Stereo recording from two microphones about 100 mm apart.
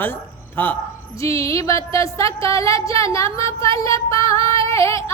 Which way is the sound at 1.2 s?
30° left (ahead or behind).